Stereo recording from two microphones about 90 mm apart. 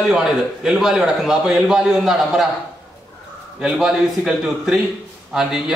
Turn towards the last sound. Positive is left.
turn(degrees=-5)  # may be behind; listen again after turning